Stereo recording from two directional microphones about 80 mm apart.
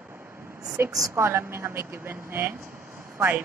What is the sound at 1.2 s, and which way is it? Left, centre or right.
Speech, right.